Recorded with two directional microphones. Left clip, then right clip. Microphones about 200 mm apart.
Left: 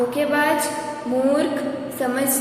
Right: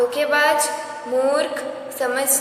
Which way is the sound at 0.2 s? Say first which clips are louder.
Right 1 dB; 25° right (ahead or behind).